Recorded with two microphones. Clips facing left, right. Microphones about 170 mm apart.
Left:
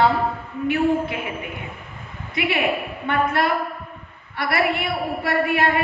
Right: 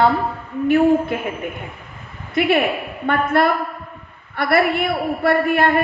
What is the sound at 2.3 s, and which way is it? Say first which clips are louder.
A woman's voice: right 5 dB; 55° right (ahead or behind).